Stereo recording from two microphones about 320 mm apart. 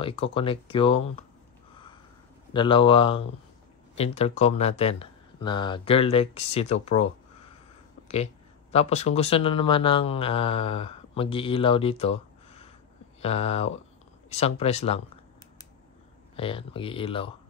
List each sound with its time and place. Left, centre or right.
0.0 s speech: centre
2.5 s speech: centre
8.7 s speech: centre
16.3 s speech: centre